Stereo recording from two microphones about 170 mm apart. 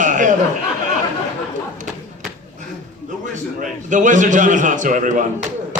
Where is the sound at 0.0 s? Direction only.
50° right (ahead or behind).